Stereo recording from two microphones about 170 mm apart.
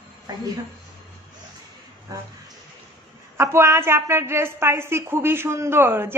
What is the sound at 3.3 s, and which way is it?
A woman's voice, 15° right (ahead or behind).